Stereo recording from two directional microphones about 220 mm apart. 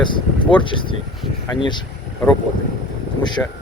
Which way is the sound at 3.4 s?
5° left (ahead or behind).